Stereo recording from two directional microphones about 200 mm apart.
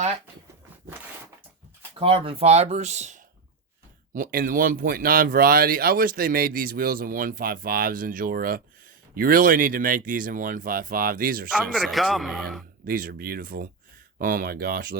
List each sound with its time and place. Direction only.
2.0 s speech: 30° right (ahead or behind); by 11.4 s 45° right (ahead or behind)
11.5 s a man's voice: centre (ahead or behind)
12.8 s speech: 45° right (ahead or behind)